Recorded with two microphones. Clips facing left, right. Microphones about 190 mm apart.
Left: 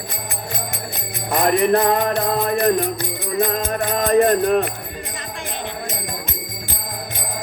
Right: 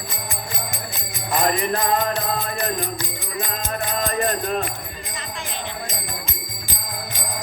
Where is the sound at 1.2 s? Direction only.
60° left (ahead or behind).